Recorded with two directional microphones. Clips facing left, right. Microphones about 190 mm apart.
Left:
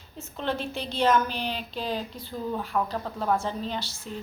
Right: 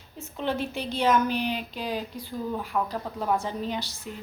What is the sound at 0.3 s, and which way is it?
A woman's voice, 10° right (ahead or behind).